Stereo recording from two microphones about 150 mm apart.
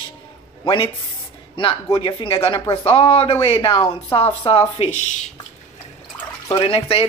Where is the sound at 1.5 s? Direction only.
35° left (ahead or behind).